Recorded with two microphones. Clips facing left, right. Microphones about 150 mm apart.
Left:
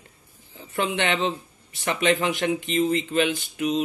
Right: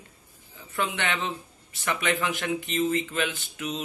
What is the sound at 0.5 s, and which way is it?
Speech, 25° left (ahead or behind).